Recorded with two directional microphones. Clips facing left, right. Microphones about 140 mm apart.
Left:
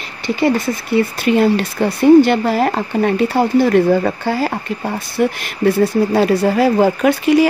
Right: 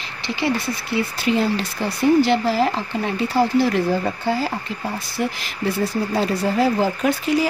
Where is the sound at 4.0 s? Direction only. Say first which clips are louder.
Left 4 dB; 65° left (ahead or behind).